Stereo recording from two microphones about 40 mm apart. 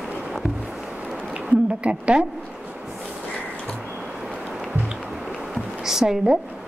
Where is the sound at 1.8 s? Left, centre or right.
Right.